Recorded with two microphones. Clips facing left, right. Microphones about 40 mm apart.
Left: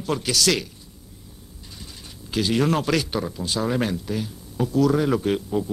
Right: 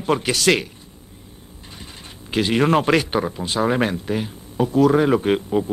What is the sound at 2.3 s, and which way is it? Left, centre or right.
Speech, right.